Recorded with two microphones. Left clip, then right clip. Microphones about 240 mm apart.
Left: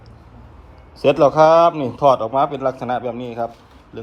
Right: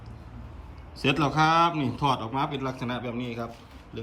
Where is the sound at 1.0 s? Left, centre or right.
Right.